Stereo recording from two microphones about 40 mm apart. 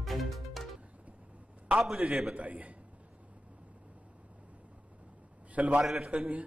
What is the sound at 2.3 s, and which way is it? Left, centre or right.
Speech, right.